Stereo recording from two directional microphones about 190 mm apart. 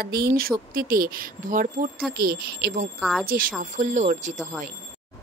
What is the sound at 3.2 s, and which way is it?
Speech, 50° right (ahead or behind).